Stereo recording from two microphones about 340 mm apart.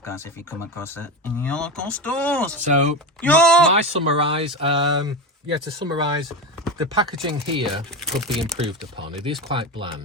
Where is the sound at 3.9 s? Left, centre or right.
Centre.